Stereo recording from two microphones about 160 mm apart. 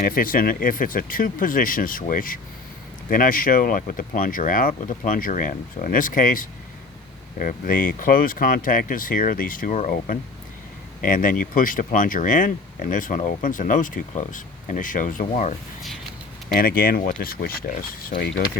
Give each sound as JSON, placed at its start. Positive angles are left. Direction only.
{"t": 0.0, "sound": "speech", "side_deg": 60}
{"t": 16.6, "sound": "speech", "side_deg": 60}